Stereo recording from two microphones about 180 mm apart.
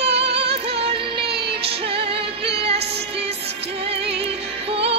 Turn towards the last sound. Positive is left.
turn(degrees=-35)  # may be behind; listen again after turning